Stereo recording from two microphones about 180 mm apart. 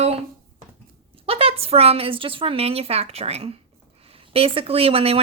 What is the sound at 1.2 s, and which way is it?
Speech, 30° right (ahead or behind).